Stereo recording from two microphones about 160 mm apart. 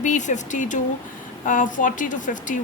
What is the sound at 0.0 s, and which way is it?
A woman's voice, 50° left (ahead or behind).